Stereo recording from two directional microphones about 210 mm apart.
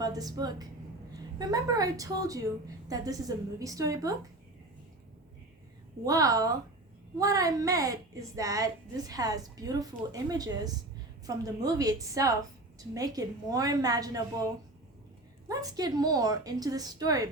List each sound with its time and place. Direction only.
0.0 s a woman's voice: 20° right (ahead or behind)
6.1 s a woman's voice: 15° right (ahead or behind)